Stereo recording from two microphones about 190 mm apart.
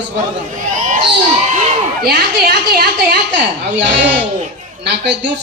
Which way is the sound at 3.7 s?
70° right (ahead or behind).